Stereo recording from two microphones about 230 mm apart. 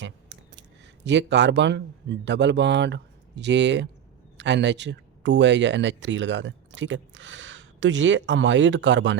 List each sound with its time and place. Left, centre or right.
1.0 s speech: right